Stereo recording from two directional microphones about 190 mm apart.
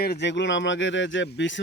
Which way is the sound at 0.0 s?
60° left (ahead or behind).